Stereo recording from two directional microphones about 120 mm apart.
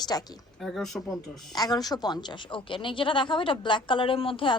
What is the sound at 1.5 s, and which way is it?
A woman's voice, 30° left (ahead or behind).